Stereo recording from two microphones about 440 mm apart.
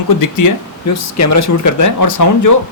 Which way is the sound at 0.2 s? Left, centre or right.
Left.